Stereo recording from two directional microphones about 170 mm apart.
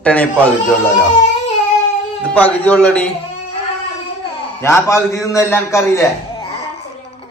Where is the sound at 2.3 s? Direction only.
10° left (ahead or behind).